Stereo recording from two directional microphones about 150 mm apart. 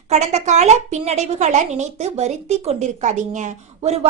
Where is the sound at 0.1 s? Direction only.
50° right (ahead or behind).